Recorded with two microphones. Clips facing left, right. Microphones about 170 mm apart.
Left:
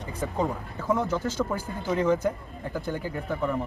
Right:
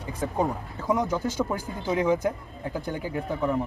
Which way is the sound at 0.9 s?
15° right (ahead or behind).